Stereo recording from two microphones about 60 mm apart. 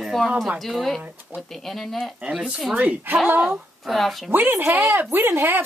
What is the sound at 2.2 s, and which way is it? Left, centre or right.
Speech, centre.